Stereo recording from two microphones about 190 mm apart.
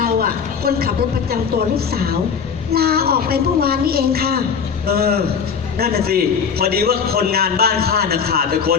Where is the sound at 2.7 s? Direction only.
55° right (ahead or behind).